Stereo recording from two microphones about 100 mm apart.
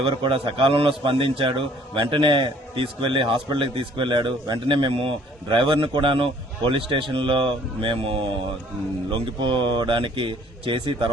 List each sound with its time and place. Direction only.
0.2 s a man's voice: 60° right (ahead or behind)